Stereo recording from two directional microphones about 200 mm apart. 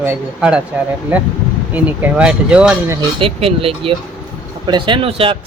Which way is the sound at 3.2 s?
25° right (ahead or behind).